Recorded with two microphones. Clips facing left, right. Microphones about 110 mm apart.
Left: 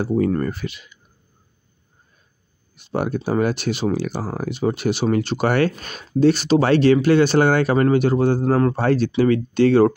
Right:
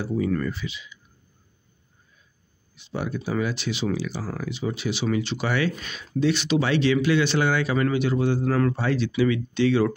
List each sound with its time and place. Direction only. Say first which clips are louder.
0.0 s speech: left 5 dB; 50° left (ahead or behind)
2.7 s speech: left 7 dB; 50° left (ahead or behind)